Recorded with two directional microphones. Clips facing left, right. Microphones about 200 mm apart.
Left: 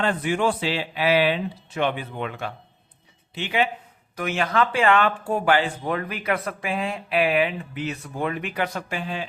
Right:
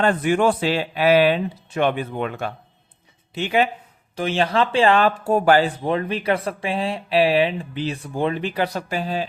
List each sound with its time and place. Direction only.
0.0 s a man's voice: 50° right (ahead or behind)
4.1 s speech: 30° right (ahead or behind)
5.8 s speech: 25° right (ahead or behind)